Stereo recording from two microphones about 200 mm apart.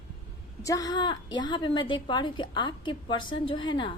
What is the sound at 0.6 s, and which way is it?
A woman's voice, 15° left (ahead or behind).